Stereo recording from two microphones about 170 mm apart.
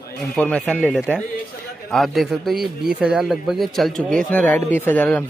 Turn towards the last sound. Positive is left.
turn(degrees=10)  # may be behind; listen again after turning